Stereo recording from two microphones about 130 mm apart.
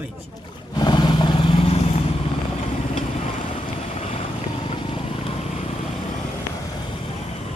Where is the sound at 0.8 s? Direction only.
35° left (ahead or behind); by 2.0 s 50° left (ahead or behind).